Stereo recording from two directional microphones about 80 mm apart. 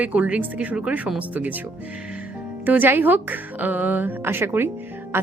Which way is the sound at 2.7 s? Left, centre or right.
Right.